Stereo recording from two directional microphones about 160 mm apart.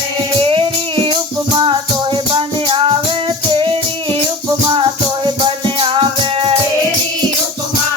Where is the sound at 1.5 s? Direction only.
30° right (ahead or behind).